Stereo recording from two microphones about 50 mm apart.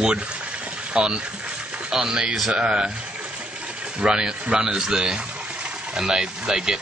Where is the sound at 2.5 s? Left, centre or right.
Right.